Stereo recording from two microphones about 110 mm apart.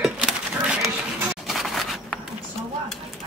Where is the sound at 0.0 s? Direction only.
5° right (ahead or behind).